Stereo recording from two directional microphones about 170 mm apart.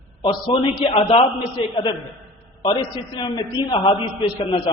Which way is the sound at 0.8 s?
35° left (ahead or behind).